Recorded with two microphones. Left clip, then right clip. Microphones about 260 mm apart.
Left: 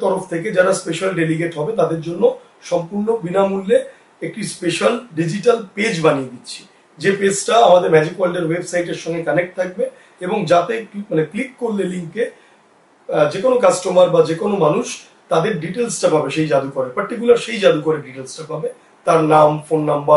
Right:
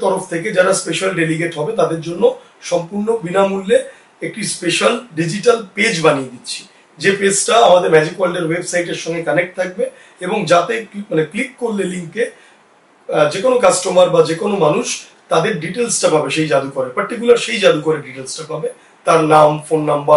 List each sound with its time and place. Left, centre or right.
0.3 s speech: centre
2.8 s speech: left
3.3 s speech: centre
16.6 s speech: centre